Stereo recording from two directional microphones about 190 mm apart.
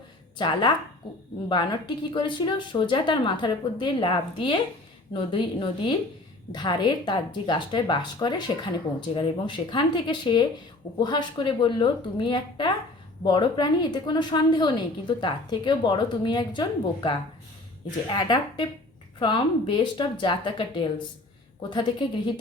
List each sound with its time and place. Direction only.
0.3 s speech: 25° left (ahead or behind)